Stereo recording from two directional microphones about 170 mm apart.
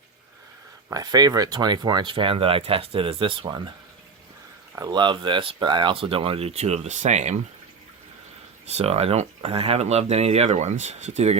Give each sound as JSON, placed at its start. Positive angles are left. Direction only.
{"t": 0.9, "sound": "speech", "side_deg": -20}
{"t": 4.7, "sound": "speech", "side_deg": -25}
{"t": 8.6, "sound": "speech", "side_deg": -40}